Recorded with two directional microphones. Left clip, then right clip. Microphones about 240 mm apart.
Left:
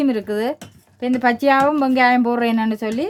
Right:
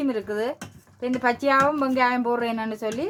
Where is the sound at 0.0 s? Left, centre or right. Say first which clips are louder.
Left 6 dB; left.